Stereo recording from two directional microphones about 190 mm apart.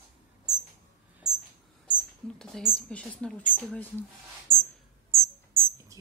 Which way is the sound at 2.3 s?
Centre (ahead or behind).